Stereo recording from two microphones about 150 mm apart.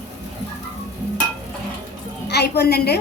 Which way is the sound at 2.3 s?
90° left.